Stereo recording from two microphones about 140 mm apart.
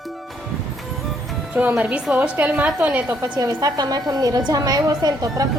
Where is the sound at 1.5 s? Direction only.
10° right (ahead or behind).